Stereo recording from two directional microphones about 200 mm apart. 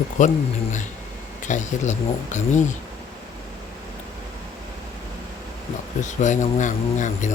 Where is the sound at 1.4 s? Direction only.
35° left (ahead or behind).